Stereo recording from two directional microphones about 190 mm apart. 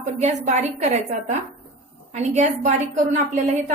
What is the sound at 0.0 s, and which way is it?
A woman's voice, 40° right (ahead or behind).